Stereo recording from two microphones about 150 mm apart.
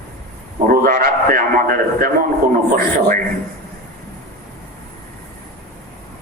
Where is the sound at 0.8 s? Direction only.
70° right (ahead or behind).